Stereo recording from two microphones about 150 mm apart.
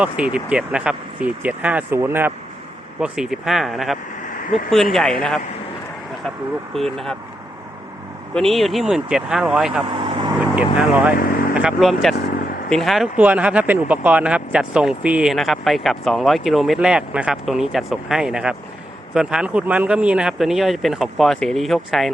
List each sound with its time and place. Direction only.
0.0 s speech: 10° right (ahead or behind)
3.0 s speech: 5° right (ahead or behind)
4.2 s vehicle: 65° left (ahead or behind)
4.7 s speech: centre (ahead or behind)
6.7 s speech: centre (ahead or behind)
8.4 s speech: centre (ahead or behind)
10.0 s vehicle: 35° right (ahead or behind)
10.3 s vehicle: 10° right (ahead or behind)
10.8 s speech: 10° right (ahead or behind)
11.1 s vehicle: 70° left (ahead or behind)
11.5 s speech: 5° right (ahead or behind)
12.2 s vehicle: 80° left
12.7 s speech: centre (ahead or behind)